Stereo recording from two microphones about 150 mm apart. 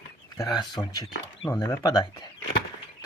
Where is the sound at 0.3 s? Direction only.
20° left (ahead or behind).